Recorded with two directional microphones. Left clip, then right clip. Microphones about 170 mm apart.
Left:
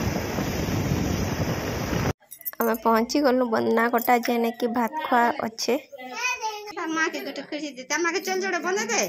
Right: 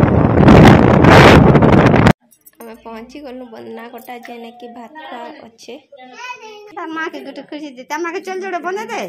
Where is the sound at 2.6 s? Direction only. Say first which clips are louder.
Left 11 dB; 35° left (ahead or behind).